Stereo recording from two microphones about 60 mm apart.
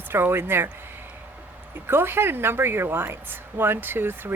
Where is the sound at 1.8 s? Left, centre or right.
Right.